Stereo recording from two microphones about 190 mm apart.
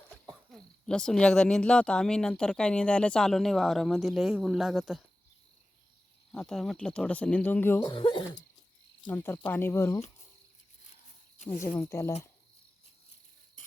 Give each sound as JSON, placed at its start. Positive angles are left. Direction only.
{"t": 0.3, "sound": "speech", "side_deg": 5}
{"t": 6.3, "sound": "speech", "side_deg": 5}
{"t": 7.9, "sound": "speech", "side_deg": 25}
{"t": 9.1, "sound": "speech", "side_deg": 10}
{"t": 11.8, "sound": "speech", "side_deg": 15}
{"t": 13.6, "sound": "insect", "side_deg": 45}